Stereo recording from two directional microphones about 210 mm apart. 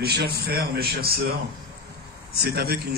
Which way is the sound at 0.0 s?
50° right (ahead or behind).